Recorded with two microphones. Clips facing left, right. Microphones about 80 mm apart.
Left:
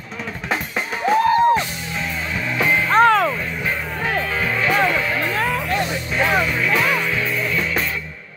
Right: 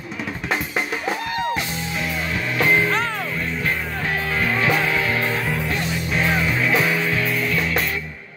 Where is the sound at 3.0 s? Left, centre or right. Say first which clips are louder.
Left 12 dB; left.